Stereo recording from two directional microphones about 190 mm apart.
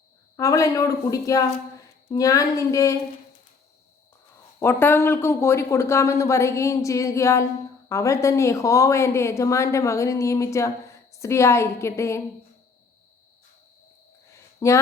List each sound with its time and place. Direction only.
0.3 s speech: 15° left (ahead or behind)
4.6 s speech: 10° left (ahead or behind)
14.3 s a sound: 15° left (ahead or behind)